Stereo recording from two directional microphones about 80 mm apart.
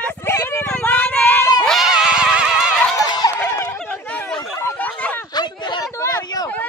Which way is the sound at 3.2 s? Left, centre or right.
Left.